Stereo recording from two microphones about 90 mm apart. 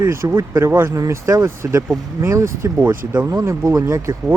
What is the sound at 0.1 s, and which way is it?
Speech, 30° right (ahead or behind).